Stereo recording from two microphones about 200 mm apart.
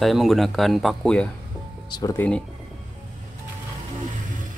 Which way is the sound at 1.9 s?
15° left (ahead or behind).